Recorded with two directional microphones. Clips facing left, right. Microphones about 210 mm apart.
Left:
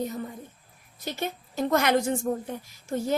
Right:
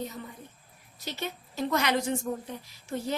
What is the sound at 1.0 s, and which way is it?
A woman's voice, 50° left (ahead or behind).